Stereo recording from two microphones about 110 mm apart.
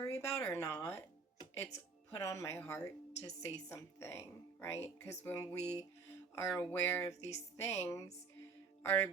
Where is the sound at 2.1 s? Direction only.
30° left (ahead or behind).